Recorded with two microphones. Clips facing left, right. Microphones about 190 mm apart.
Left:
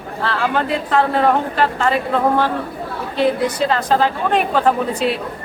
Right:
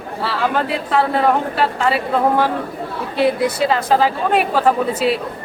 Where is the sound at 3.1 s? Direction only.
10° right (ahead or behind).